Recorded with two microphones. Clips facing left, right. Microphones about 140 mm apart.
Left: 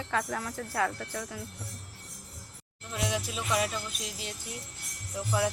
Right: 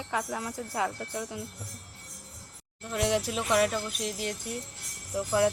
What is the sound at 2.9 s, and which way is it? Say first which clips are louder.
Jingle bell: right 5 dB; 60° right (ahead or behind).